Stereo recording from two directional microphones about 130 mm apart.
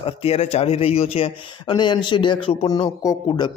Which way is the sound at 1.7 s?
35° left (ahead or behind).